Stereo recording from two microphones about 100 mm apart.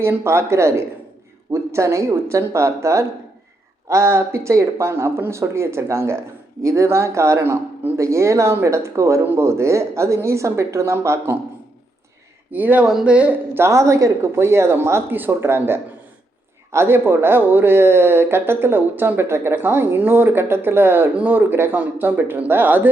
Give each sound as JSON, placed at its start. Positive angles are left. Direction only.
{"t": 0.0, "sound": "speech", "side_deg": -25}
{"t": 12.5, "sound": "speech", "side_deg": -15}